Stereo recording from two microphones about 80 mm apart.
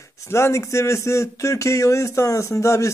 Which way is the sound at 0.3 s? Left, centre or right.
Left.